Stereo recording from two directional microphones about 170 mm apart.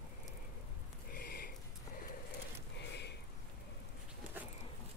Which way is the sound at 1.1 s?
60° left (ahead or behind).